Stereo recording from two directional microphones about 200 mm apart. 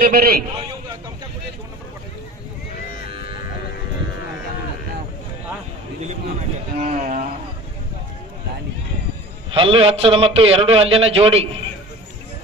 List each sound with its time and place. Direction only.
0.0 s a man's voice: 45° right (ahead or behind)
6.8 s a sound: 40° right (ahead or behind)
9.5 s a man's voice: 25° right (ahead or behind)